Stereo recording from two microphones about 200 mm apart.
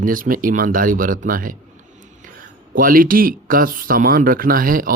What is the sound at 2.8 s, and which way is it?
Speech, 45° right (ahead or behind).